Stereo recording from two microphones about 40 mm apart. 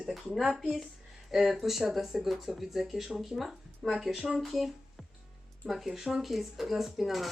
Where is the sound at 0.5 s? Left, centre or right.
Centre.